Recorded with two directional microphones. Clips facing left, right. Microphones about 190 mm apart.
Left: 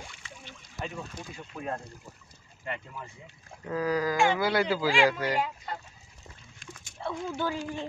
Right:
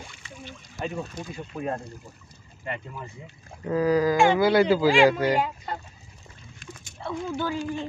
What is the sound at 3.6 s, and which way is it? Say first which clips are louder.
Speech: right 7 dB; 25° right (ahead or behind).